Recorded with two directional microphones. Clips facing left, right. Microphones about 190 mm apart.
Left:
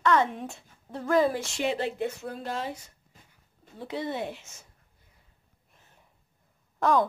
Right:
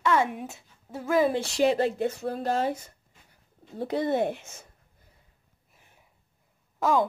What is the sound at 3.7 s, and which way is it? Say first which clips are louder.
Speech: right 7 dB; 45° right (ahead or behind).